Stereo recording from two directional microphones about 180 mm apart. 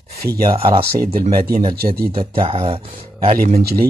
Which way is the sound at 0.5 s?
30° right (ahead or behind).